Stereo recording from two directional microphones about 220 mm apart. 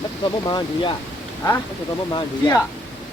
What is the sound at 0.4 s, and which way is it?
Speech, 20° left (ahead or behind).